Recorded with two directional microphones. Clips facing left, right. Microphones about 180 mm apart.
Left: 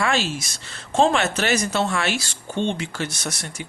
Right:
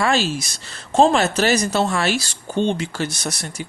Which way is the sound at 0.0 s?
35° right (ahead or behind).